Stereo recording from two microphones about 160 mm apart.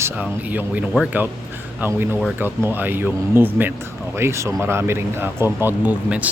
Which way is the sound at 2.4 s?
15° right (ahead or behind).